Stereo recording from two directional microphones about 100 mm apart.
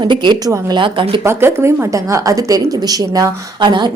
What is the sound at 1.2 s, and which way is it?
A woman's voice, 25° right (ahead or behind).